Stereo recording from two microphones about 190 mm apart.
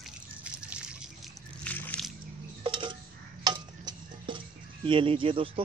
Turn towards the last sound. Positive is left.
turn(degrees=-30)  # may be behind; listen again after turning